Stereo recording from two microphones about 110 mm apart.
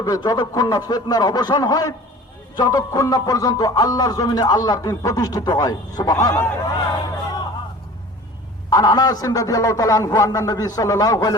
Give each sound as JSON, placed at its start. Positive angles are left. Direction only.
{"t": 0.0, "sound": "a man's voice", "side_deg": 40}
{"t": 8.7, "sound": "a man's voice", "side_deg": 40}